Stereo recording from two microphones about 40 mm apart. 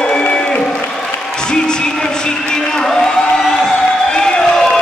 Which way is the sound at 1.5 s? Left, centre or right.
Centre.